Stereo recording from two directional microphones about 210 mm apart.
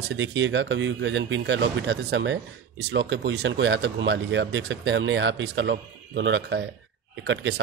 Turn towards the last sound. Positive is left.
turn(degrees=-60)  # may be behind; listen again after turning